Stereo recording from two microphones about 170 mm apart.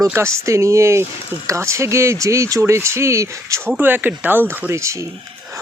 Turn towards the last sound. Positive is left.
turn(degrees=-15)  # may be behind; listen again after turning